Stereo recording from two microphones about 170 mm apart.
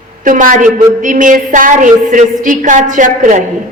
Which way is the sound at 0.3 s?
50° right (ahead or behind).